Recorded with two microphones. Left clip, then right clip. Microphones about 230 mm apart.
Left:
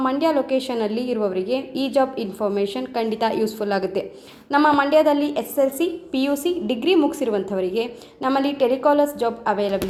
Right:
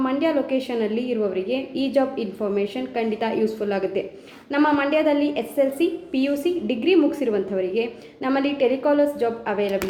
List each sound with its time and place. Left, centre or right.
0.0 s a woman's voice: left